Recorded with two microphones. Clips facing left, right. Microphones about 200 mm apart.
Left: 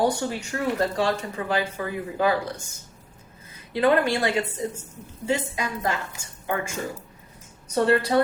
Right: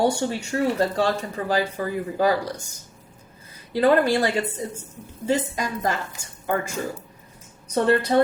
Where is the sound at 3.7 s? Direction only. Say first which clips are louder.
Right 2 dB; 35° right (ahead or behind).